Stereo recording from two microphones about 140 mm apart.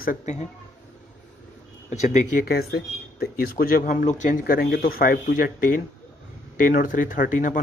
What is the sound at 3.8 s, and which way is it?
Speech, 65° left (ahead or behind).